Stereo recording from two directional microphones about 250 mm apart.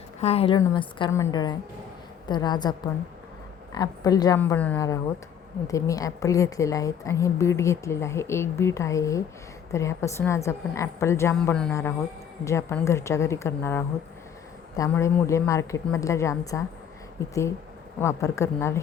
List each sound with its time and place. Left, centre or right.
0.2 s a woman's voice: left
18.0 s a woman's voice: centre